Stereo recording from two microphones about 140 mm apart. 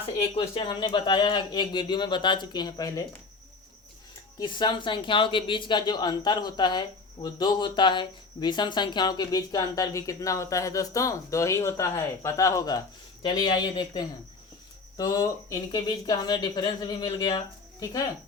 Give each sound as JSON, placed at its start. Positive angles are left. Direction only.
{"t": 0.0, "sound": "speech", "side_deg": 40}
{"t": 4.4, "sound": "speech", "side_deg": 35}